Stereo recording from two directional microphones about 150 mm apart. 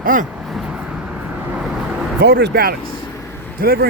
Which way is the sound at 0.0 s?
65° right (ahead or behind).